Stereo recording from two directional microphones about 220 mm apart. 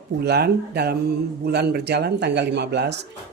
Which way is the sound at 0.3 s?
45° right (ahead or behind).